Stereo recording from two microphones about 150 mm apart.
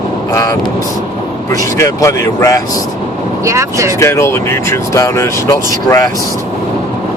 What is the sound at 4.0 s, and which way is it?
Speech, 20° left (ahead or behind).